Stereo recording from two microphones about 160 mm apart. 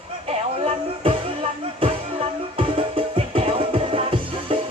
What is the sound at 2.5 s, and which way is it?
Music, 35° right (ahead or behind).